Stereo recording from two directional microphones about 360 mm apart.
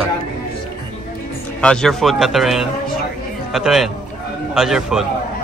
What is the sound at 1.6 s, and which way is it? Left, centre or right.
A man's voice, centre.